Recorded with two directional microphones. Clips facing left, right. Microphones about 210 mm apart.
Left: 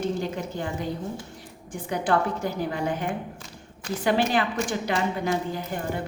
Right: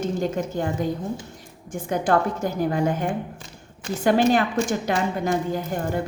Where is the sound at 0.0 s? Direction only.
45° right (ahead or behind).